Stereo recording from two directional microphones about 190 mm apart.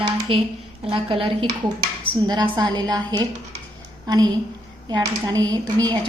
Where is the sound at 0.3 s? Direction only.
25° right (ahead or behind).